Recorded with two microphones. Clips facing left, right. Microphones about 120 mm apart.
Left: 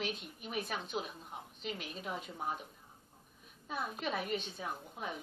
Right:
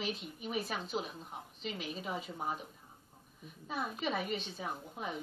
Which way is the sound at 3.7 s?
Centre (ahead or behind).